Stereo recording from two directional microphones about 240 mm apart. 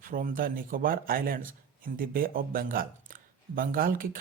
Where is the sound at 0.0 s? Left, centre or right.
Right.